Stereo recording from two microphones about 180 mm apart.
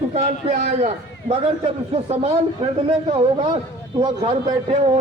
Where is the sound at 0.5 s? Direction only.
40° right (ahead or behind).